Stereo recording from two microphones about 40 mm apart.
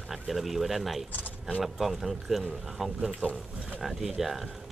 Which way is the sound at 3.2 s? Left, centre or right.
Left.